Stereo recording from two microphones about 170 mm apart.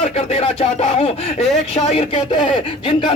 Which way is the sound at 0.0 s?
35° left (ahead or behind).